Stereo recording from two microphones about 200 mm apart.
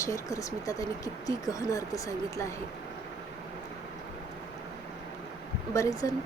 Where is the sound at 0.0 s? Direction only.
15° left (ahead or behind).